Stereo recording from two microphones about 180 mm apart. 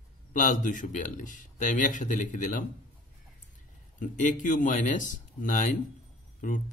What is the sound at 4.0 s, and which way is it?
Speech, 45° left (ahead or behind).